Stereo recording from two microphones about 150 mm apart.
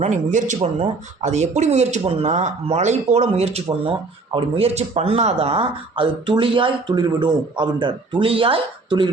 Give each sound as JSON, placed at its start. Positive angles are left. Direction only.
{"t": 0.0, "sound": "speech", "side_deg": -55}